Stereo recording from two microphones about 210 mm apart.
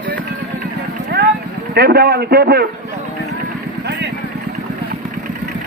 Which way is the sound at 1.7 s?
50° right (ahead or behind).